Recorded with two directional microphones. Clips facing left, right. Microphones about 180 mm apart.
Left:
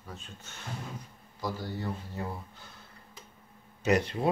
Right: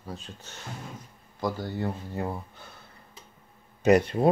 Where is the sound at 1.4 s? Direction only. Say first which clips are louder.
Right 5 dB; 55° right (ahead or behind).